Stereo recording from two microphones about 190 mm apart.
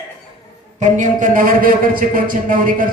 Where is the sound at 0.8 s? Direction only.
40° right (ahead or behind).